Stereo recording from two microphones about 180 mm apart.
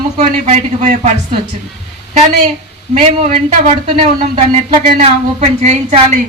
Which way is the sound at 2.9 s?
40° right (ahead or behind).